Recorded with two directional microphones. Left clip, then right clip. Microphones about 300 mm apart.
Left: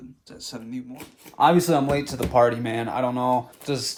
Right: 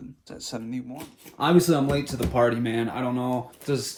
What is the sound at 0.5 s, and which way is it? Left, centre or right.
Speech, centre.